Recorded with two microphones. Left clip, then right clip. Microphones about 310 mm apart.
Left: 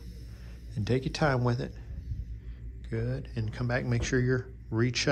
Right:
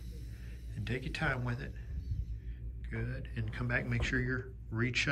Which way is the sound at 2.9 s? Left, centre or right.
Centre.